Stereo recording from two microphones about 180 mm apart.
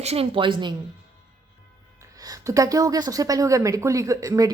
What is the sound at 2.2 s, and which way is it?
A woman's voice, 20° right (ahead or behind).